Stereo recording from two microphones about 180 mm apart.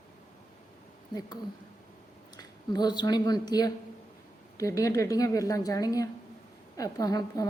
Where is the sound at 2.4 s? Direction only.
20° left (ahead or behind).